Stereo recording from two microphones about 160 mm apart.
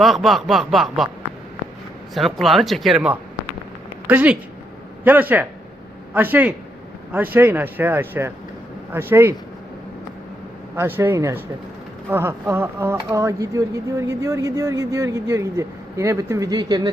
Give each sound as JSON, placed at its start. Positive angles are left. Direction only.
{"t": 0.0, "sound": "snicker", "side_deg": 0}
{"t": 2.1, "sound": "snicker", "side_deg": 0}
{"t": 4.0, "sound": "speech", "side_deg": -10}
{"t": 10.8, "sound": "speech", "side_deg": -15}